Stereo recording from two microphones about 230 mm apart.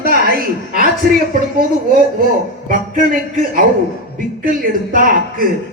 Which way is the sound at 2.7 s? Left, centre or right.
Right.